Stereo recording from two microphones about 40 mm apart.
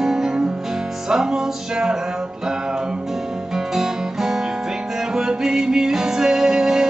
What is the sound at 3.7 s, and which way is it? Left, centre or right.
Music, centre.